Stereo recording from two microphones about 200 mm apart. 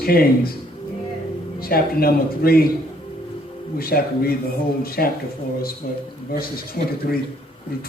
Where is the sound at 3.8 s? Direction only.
50° left (ahead or behind).